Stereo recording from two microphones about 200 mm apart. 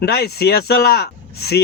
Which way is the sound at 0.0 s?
55° left (ahead or behind).